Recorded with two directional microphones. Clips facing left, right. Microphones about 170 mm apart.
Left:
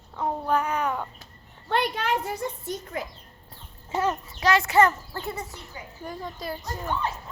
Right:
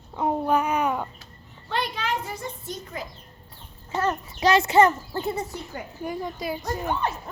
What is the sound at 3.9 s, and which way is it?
Speech, 10° left (ahead or behind).